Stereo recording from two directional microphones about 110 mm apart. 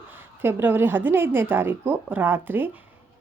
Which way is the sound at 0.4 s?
20° right (ahead or behind).